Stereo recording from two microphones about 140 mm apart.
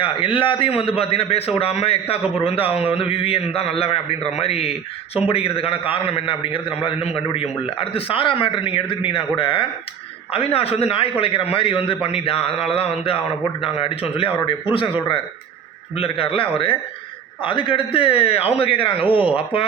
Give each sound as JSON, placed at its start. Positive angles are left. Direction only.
{"t": 0.0, "sound": "a man's voice", "side_deg": 40}
{"t": 16.0, "sound": "a man's voice", "side_deg": 45}